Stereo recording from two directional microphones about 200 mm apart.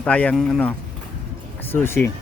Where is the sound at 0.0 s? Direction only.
5° left (ahead or behind).